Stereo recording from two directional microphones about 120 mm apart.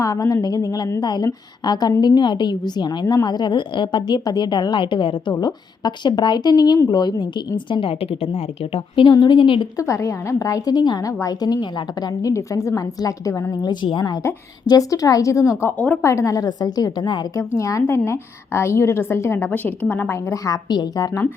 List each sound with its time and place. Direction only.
0.0 s a woman's voice: 30° left (ahead or behind)
9.7 s a woman's voice: 25° left (ahead or behind)
20.3 s a woman's voice: 30° left (ahead or behind)